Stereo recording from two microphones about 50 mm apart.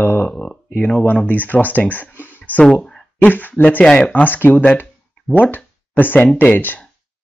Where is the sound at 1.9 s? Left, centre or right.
Left.